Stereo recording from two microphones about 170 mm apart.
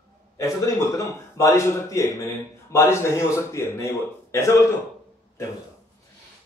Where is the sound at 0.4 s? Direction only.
20° left (ahead or behind).